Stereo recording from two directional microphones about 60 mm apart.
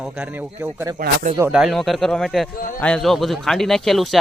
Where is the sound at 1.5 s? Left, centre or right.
Centre.